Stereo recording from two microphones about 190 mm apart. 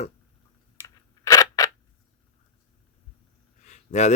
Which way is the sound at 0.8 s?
20° left (ahead or behind).